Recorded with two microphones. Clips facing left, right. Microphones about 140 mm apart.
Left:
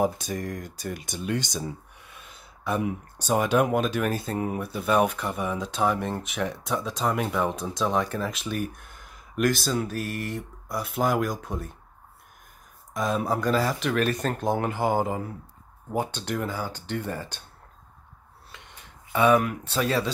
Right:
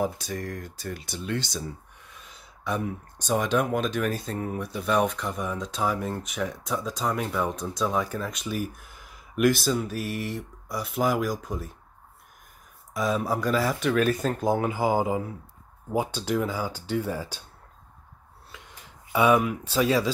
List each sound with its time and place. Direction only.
0.0 s speech: 20° left (ahead or behind)
2.0 s speech: centre (ahead or behind)
12.9 s speech: centre (ahead or behind)
19.1 s speech: 5° right (ahead or behind)